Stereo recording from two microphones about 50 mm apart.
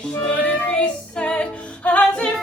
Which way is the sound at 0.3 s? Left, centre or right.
Left.